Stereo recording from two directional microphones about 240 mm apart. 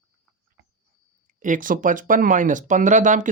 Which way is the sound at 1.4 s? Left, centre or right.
Right.